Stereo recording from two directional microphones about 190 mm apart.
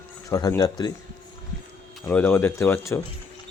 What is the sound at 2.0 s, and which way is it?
Speech, 10° left (ahead or behind).